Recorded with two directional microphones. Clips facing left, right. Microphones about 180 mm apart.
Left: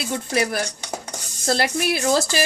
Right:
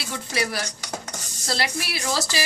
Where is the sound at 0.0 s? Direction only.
50° left (ahead or behind).